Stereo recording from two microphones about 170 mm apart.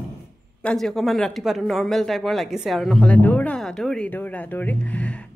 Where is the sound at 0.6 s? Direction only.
5° left (ahead or behind).